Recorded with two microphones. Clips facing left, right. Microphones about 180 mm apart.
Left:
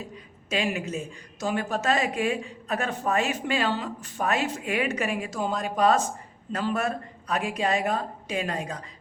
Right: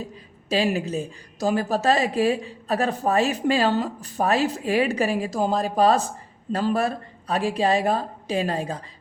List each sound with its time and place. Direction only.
0.4 s a woman's voice: 35° right (ahead or behind)